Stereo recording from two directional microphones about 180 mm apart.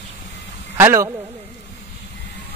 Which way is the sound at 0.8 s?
15° right (ahead or behind).